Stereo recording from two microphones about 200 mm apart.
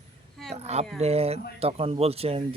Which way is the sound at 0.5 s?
30° right (ahead or behind).